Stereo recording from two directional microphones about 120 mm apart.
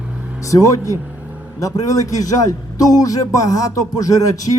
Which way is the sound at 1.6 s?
30° left (ahead or behind).